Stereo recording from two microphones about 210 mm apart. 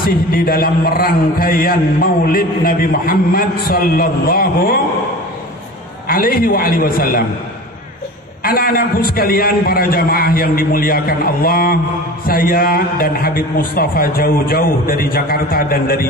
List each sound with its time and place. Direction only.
0.0 s a man's voice: 45° left (ahead or behind)
6.0 s a man's voice: 45° left (ahead or behind)
8.5 s a man's voice: 45° left (ahead or behind)